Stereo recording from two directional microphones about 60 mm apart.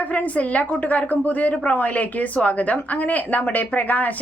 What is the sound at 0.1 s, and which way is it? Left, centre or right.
A woman's voice, left.